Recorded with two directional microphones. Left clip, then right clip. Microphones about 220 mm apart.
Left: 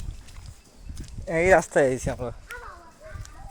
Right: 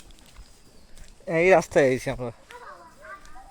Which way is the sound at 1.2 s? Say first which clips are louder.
Even; 35° right (ahead or behind).